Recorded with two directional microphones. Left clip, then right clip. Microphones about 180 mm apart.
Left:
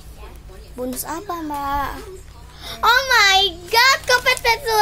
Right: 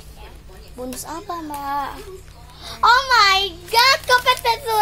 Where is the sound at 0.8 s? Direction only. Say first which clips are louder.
Left 3 dB; 20° left (ahead or behind).